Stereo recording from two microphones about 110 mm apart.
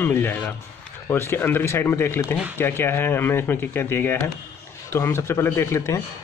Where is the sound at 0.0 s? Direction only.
20° left (ahead or behind).